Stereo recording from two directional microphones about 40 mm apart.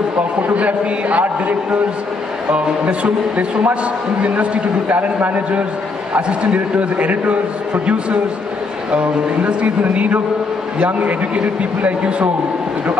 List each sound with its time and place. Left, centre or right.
0.4 s a man's voice: right
4.8 s a man's voice: right
9.5 s a man's voice: right